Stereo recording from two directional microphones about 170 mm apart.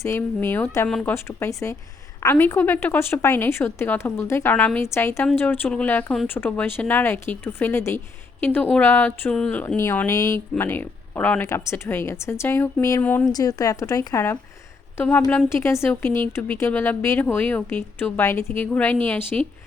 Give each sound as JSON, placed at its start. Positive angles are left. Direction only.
{"t": 0.0, "sound": "speech", "side_deg": 15}
{"t": 13.3, "sound": "a woman's voice", "side_deg": 20}